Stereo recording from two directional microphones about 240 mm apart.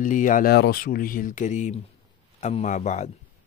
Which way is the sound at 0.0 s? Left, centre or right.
Left.